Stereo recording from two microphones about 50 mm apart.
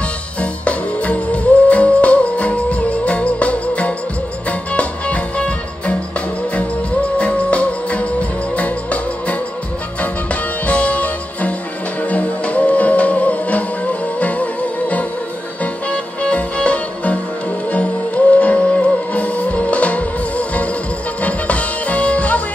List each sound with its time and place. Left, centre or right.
0.4 s music: left
10.7 s music: left